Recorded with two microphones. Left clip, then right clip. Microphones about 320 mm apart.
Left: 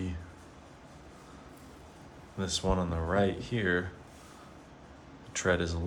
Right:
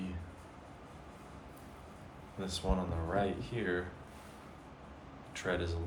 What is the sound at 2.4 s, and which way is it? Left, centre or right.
Speech, left.